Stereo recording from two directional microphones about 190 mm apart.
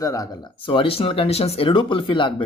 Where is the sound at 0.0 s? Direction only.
20° left (ahead or behind).